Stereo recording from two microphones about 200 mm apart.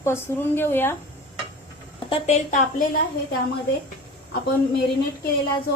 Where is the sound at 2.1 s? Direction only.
30° left (ahead or behind).